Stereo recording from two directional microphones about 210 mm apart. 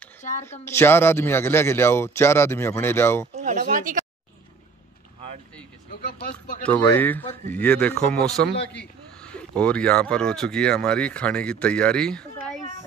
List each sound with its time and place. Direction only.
0.5 s a man's voice: 10° left (ahead or behind)
3.3 s speech: 35° right (ahead or behind)
6.6 s a man's voice: 10° left (ahead or behind)